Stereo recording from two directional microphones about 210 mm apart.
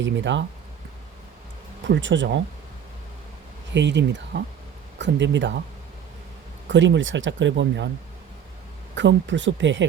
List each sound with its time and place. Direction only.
0.0 s speech: 60° right (ahead or behind)
1.9 s speech: 60° right (ahead or behind)
3.7 s speech: 55° right (ahead or behind)
6.7 s speech: 60° right (ahead or behind)
9.0 s speech: 60° right (ahead or behind)